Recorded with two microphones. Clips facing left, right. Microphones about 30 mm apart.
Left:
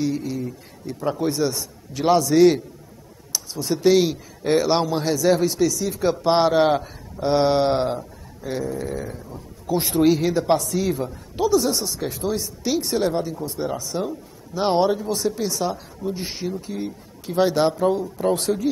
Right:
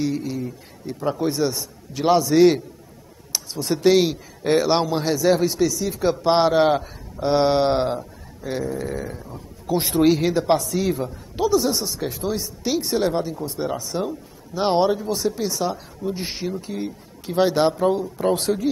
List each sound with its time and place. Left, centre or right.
0.0 s speech: centre
3.3 s speech: right
18.1 s speech: centre